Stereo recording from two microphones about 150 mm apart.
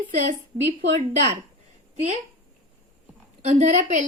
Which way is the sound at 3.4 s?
50° right (ahead or behind).